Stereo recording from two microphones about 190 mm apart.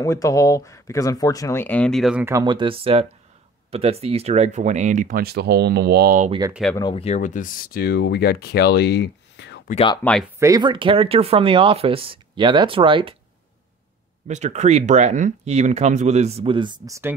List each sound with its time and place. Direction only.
0.0 s speech: 15° left (ahead or behind); by 2.2 s centre (ahead or behind)
2.2 s speech: 20° right (ahead or behind); by 6.3 s 45° right (ahead or behind)
6.7 s speech: 25° left (ahead or behind); by 9.6 s 65° left (ahead or behind)
10.0 s speech: 10° left (ahead or behind)
10.4 s speech: 20° right (ahead or behind)
14.2 s speech: 35° right (ahead or behind); by 17.1 s 15° right (ahead or behind)